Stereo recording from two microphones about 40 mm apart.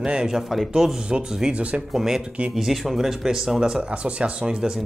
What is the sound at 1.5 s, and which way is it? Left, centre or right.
Speech, right.